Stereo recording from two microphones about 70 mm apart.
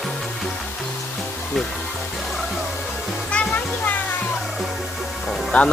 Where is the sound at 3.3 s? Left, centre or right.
Left.